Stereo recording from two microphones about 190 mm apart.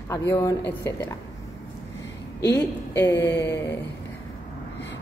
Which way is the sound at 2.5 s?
10° left (ahead or behind).